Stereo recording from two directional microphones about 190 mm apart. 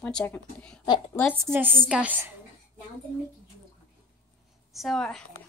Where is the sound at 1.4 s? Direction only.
10° right (ahead or behind).